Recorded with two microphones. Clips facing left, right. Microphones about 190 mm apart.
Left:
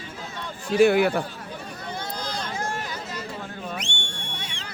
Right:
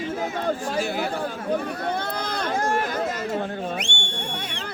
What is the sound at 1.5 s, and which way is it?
Run, 60° right (ahead or behind).